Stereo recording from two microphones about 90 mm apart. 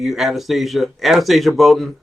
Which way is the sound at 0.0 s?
5° right (ahead or behind).